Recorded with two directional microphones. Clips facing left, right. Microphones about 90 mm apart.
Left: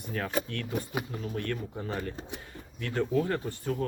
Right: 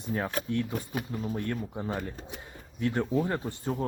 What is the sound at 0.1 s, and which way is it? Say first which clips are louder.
Speech: right 2 dB; 20° right (ahead or behind).